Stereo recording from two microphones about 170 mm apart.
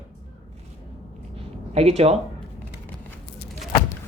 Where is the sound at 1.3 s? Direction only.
35° right (ahead or behind).